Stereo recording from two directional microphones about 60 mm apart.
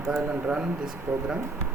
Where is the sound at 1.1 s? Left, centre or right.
Right.